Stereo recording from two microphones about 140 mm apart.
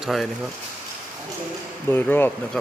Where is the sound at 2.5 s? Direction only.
5° left (ahead or behind).